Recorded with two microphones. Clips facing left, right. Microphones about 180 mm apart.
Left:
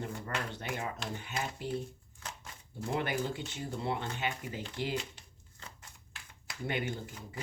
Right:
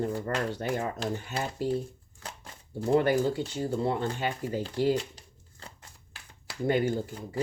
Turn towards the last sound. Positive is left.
turn(degrees=-35)  # may be behind; listen again after turning